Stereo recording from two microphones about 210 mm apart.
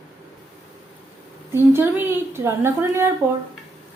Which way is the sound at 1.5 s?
10° right (ahead or behind).